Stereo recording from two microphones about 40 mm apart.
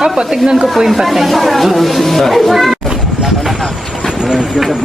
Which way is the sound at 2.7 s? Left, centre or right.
Centre.